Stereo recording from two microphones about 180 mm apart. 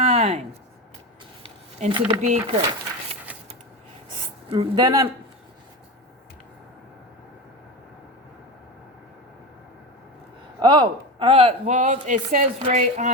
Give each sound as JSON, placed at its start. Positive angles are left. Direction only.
{"t": 0.0, "sound": "a sound", "side_deg": -35}
{"t": 1.9, "sound": "speech", "side_deg": -25}
{"t": 2.2, "sound": "speech", "side_deg": -40}
{"t": 4.4, "sound": "speech", "side_deg": -25}
{"t": 10.6, "sound": "a man's voice", "side_deg": -25}